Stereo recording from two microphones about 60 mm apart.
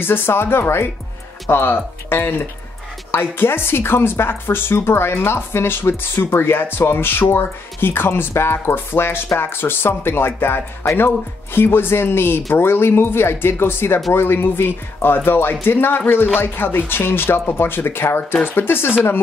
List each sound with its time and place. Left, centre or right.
0.0 s speech: left